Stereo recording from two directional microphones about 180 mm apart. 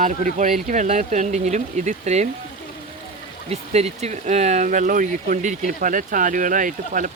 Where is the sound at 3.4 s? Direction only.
35° right (ahead or behind).